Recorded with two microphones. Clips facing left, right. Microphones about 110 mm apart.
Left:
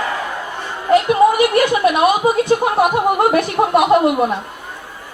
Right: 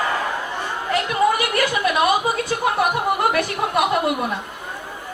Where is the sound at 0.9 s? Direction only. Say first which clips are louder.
Left 8 dB; 25° left (ahead or behind).